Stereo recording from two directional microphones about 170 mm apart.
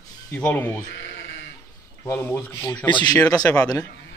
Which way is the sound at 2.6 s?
25° left (ahead or behind).